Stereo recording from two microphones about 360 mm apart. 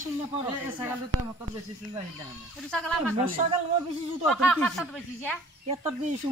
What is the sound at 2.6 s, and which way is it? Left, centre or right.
Speech, centre.